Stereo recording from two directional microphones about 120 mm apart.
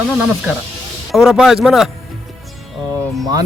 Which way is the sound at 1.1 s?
5° right (ahead or behind).